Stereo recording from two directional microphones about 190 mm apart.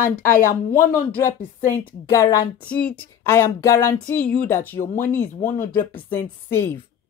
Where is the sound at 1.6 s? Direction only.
10° left (ahead or behind).